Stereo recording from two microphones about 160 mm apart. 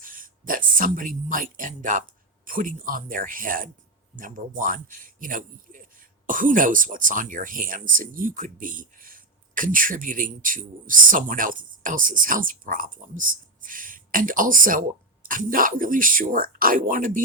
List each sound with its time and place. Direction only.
0.0 s speech: 60° right (ahead or behind)